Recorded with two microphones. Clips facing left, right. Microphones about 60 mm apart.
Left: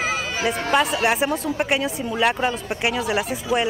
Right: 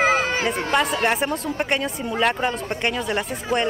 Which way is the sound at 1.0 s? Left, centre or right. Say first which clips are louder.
Left 1 dB; centre.